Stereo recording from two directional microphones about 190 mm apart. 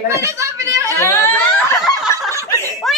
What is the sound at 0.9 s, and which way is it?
Snicker, 15° left (ahead or behind).